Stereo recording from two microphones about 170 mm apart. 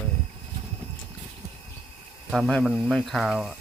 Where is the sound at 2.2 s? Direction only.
Centre (ahead or behind).